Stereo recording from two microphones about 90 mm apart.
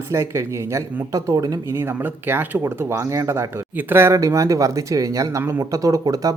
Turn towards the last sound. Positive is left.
turn(degrees=-40)  # may be behind; listen again after turning